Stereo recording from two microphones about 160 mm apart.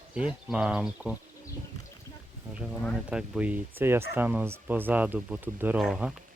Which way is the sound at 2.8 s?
Centre (ahead or behind).